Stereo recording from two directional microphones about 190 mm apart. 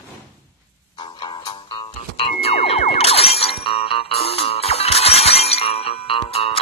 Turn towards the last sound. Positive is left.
turn(degrees=30)  # may be behind; listen again after turning